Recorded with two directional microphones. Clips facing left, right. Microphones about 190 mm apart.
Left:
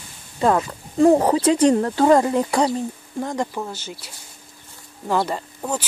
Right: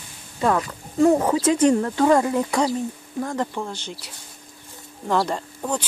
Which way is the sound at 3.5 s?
5° left (ahead or behind).